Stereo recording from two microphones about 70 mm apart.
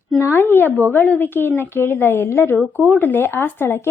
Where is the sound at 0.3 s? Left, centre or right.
Left.